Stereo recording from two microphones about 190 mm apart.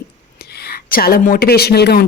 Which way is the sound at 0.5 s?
55° left (ahead or behind).